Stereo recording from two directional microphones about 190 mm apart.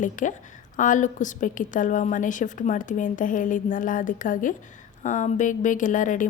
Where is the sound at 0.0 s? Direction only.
40° left (ahead or behind).